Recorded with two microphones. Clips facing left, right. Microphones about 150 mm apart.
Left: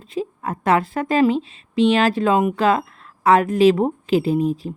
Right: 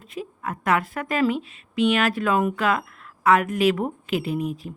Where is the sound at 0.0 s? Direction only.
30° left (ahead or behind).